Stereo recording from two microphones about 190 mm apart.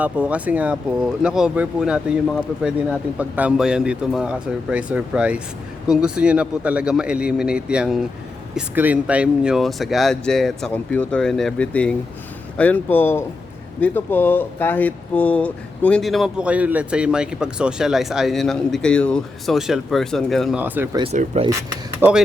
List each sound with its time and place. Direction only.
0.0 s speech: 5° right (ahead or behind)
20.9 s speech: 30° right (ahead or behind)
22.0 s speech: 10° right (ahead or behind)